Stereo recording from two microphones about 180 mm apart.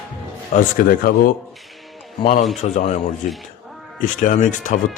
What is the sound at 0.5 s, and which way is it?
Speech, 50° left (ahead or behind).